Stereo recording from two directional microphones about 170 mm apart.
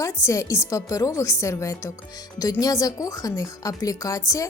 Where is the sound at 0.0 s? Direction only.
15° left (ahead or behind).